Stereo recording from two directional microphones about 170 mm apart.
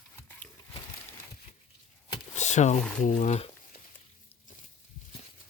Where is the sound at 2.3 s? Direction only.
45° left (ahead or behind).